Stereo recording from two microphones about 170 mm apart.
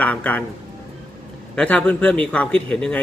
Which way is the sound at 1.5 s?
5° left (ahead or behind).